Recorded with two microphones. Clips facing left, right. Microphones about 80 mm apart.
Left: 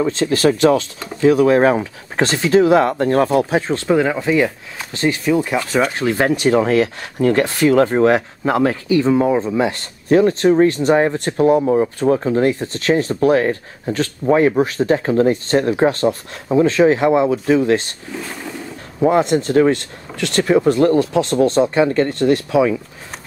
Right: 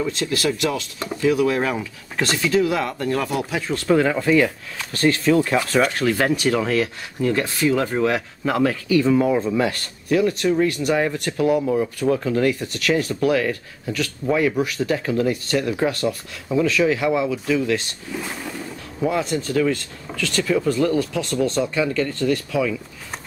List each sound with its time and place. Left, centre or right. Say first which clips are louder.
0.0 s speech: left 7 dB; left; by 5.6 s centre
5.9 s speech: left 3 dB; left
7.9 s speech: left 7 dB; left
19.3 s speech: left 7 dB; left
19.7 s speech: left 5 dB; left
22.3 s speech: left 8 dB; left